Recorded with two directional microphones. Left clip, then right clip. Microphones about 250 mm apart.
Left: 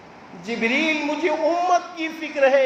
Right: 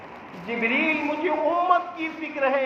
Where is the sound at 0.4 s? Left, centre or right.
Left.